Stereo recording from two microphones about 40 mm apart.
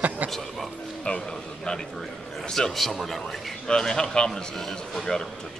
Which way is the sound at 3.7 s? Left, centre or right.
Centre.